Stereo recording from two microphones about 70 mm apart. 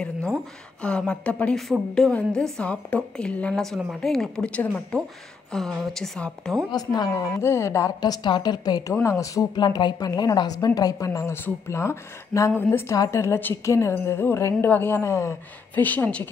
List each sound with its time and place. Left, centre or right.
0.0 s a woman's voice: centre
1.7 s a woman's voice: centre
2.6 s a woman's voice: centre
3.7 s a woman's voice: centre
6.7 s a woman's voice: left
7.2 s speech: left
8.0 s a woman's voice: left
9.0 s speech: left
9.6 s a woman's voice: left
11.4 s a woman's voice: left
12.9 s a woman's voice: left
15.7 s speech: left